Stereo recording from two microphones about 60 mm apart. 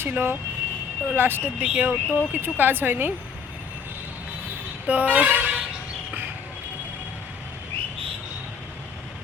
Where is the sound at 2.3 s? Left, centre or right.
Right.